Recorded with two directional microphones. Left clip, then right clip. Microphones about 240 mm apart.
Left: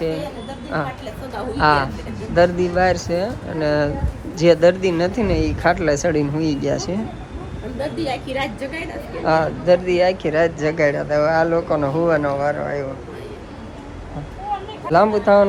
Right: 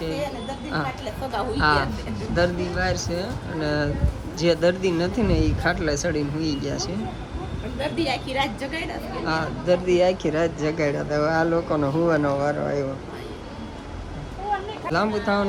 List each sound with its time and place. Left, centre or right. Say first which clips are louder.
1.3 s a woman's voice: left 4 dB; centre
14.8 s speech: left 9 dB; centre